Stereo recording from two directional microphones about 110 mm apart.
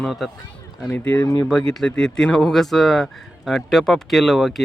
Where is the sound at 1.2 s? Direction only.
35° left (ahead or behind).